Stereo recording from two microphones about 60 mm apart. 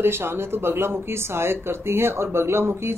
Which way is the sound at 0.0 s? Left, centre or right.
Right.